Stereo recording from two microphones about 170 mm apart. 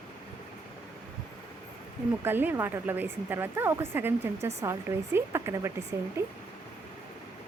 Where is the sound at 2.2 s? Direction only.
10° right (ahead or behind).